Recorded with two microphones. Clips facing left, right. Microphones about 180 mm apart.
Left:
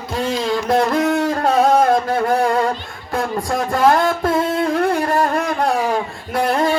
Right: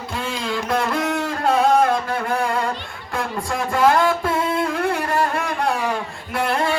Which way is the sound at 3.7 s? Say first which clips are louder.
Left 1 dB; 40° left (ahead or behind).